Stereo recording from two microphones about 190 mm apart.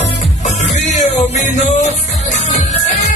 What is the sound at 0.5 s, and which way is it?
Music, 35° left (ahead or behind).